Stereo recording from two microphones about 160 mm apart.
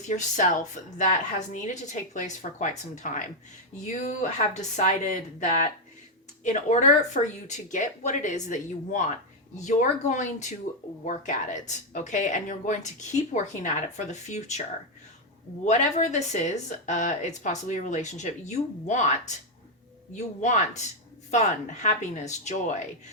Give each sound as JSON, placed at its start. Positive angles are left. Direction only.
{"t": 0.0, "sound": "speech", "side_deg": 50}
{"t": 15.6, "sound": "speech", "side_deg": 50}